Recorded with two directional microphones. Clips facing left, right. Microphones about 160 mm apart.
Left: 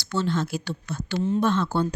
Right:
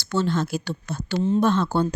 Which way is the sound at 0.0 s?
45° right (ahead or behind).